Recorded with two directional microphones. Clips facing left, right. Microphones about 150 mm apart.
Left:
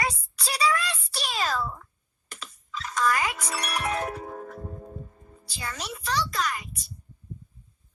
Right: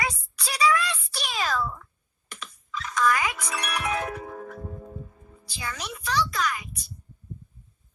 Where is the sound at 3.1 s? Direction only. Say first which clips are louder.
Right 1 dB; 30° left (ahead or behind).